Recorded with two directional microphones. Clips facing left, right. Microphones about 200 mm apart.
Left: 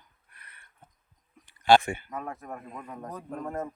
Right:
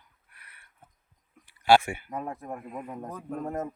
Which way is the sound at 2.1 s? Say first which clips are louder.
Right 2 dB; 35° right (ahead or behind).